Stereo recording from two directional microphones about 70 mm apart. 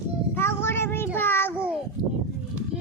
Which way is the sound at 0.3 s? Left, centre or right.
Left.